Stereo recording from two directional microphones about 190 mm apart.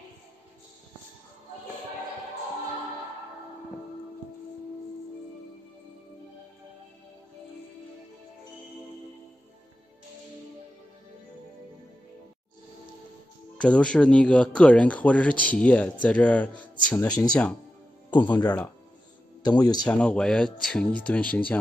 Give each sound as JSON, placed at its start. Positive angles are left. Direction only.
{"t": 13.6, "sound": "speech", "side_deg": 5}
{"t": 16.9, "sound": "speech", "side_deg": 20}
{"t": 17.3, "sound": "speech", "side_deg": 5}
{"t": 19.4, "sound": "speech", "side_deg": 20}
{"t": 19.9, "sound": "speech", "side_deg": 5}